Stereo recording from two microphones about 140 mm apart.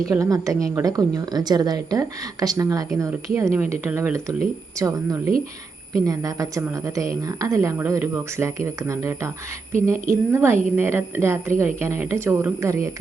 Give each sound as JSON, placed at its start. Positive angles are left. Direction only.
{"t": 0.1, "sound": "a woman's voice", "side_deg": -20}